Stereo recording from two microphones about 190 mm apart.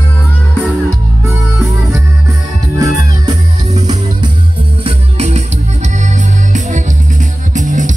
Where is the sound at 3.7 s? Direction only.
35° right (ahead or behind).